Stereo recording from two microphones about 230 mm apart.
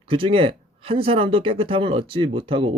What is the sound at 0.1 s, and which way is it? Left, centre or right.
Speech, right.